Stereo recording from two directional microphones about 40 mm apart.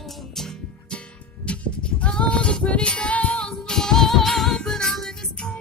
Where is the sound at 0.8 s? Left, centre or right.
Left.